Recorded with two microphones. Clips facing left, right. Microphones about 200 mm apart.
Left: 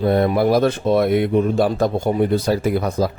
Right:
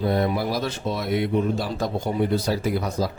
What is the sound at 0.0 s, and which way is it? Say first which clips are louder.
Speech: left 6 dB; 55° left (ahead or behind).